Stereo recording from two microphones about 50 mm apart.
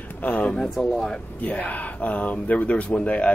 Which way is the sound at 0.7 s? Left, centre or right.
Centre.